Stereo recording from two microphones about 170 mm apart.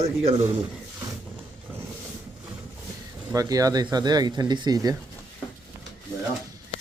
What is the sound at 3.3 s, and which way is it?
Speech, 20° right (ahead or behind).